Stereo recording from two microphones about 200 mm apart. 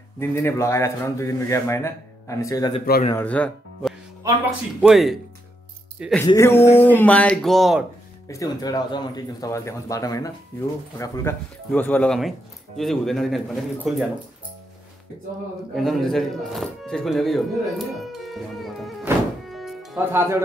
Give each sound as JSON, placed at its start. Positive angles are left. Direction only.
{"t": 0.2, "sound": "a man's voice", "side_deg": 10}
{"t": 4.2, "sound": "speech", "side_deg": -15}
{"t": 4.8, "sound": "speech", "side_deg": 0}
{"t": 6.2, "sound": "a man's voice", "side_deg": 15}
{"t": 8.3, "sound": "a man's voice", "side_deg": 20}
{"t": 15.7, "sound": "speech", "side_deg": 0}
{"t": 19.5, "sound": "music", "side_deg": 0}
{"t": 20.1, "sound": "speech", "side_deg": -10}